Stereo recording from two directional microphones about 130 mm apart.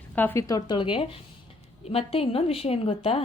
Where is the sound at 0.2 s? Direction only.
15° left (ahead or behind).